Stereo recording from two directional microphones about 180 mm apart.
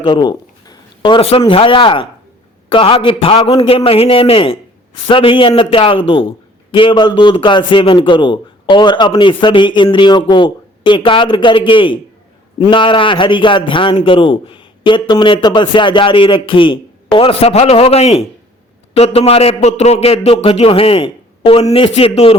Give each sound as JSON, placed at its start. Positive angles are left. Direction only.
{"t": 0.0, "sound": "a man's voice", "side_deg": 25}